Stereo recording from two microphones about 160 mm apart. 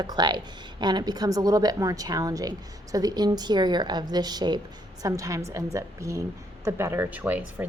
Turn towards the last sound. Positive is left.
turn(degrees=-10)  # may be behind; listen again after turning